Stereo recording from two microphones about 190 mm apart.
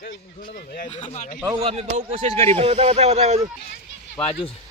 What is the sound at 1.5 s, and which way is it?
Speech, 30° right (ahead or behind).